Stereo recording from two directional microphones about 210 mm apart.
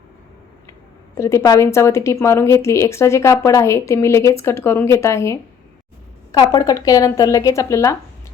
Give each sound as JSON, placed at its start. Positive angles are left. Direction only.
{"t": 1.1, "sound": "a woman's voice", "side_deg": 15}